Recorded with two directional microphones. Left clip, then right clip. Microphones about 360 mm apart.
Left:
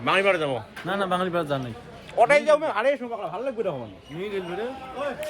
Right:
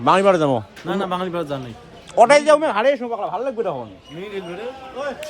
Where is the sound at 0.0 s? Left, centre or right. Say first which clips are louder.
Right 7 dB; centre.